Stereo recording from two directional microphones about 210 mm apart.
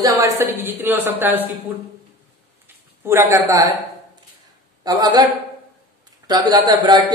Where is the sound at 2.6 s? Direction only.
10° right (ahead or behind).